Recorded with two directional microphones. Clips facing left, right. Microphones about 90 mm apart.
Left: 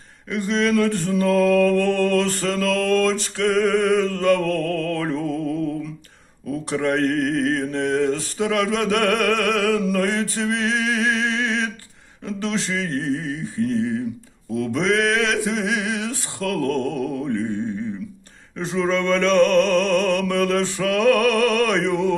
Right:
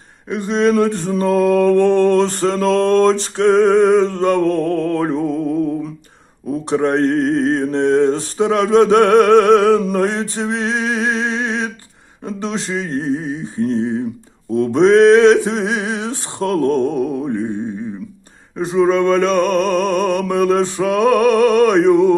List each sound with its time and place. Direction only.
0.3 s mantra: 20° right (ahead or behind)
6.7 s mantra: 25° right (ahead or behind)
13.6 s speech: 30° right (ahead or behind)
14.5 s mantra: 30° right (ahead or behind)
18.5 s music: 15° right (ahead or behind)